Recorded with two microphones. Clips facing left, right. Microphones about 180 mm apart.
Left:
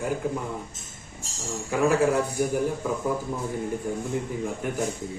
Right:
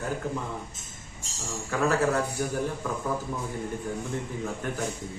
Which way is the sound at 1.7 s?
15° left (ahead or behind).